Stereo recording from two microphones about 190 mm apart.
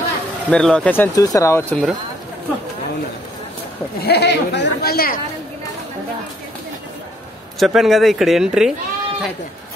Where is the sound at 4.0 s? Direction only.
60° left (ahead or behind).